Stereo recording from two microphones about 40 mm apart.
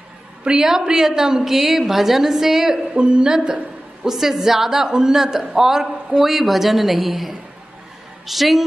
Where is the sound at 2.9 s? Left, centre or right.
Right; by 8.6 s centre.